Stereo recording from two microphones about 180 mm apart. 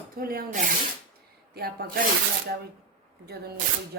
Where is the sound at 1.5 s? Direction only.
60° right (ahead or behind).